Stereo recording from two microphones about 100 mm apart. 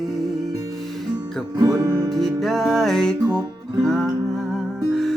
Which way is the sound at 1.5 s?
35° right (ahead or behind).